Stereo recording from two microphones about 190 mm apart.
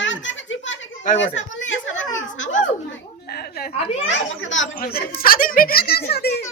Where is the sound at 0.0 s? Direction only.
80° left.